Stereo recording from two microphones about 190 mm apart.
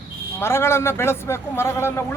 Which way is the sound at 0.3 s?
15° left (ahead or behind).